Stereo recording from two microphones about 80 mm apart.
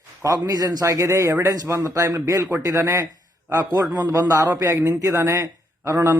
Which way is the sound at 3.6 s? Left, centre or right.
Right.